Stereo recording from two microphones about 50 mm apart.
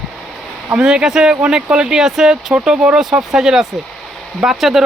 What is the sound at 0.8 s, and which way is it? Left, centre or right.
Speech, centre.